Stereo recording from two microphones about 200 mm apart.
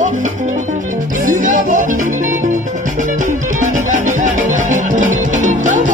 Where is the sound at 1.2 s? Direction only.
40° right (ahead or behind).